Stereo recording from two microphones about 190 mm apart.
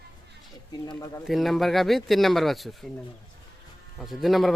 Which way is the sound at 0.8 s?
20° left (ahead or behind).